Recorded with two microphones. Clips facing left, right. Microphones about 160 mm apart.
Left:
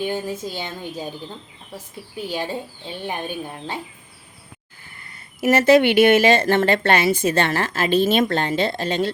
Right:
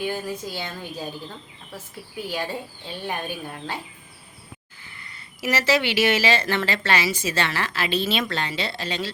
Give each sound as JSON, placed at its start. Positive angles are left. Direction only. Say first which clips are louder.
{"t": 0.0, "sound": "speech", "louder": "left 3 dB", "side_deg": 25}
{"t": 2.3, "sound": "speech", "louder": "left 3 dB", "side_deg": 25}
{"t": 4.9, "sound": "speech", "louder": "left 8 dB", "side_deg": 50}